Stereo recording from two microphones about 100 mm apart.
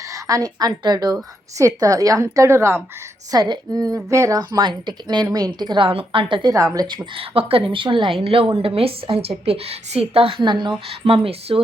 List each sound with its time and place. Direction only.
0.1 s a woman's voice: 35° right (ahead or behind)
3.3 s a woman's voice: 40° right (ahead or behind)
6.5 s a woman's voice: 35° right (ahead or behind)
6.8 s a woman's voice: 50° right (ahead or behind)
8.2 s a woman's voice: 70° right (ahead or behind)
10.4 s a woman's voice: 50° right (ahead or behind)
10.8 s a woman's voice: 70° right (ahead or behind)